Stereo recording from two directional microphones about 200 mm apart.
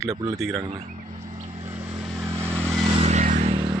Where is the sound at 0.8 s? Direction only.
40° right (ahead or behind).